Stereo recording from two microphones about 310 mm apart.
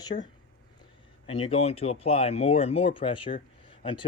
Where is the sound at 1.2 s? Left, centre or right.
Centre.